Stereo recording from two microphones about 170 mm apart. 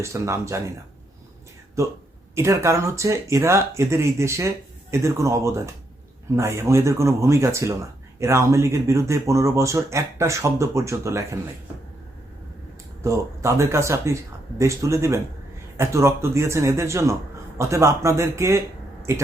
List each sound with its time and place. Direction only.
0.0 s speech: 15° right (ahead or behind)
2.3 s speech: 15° right (ahead or behind)
13.0 s speech: 15° right (ahead or behind)